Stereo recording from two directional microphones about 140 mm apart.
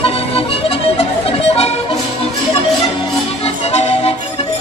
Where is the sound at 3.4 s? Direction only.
50° left (ahead or behind).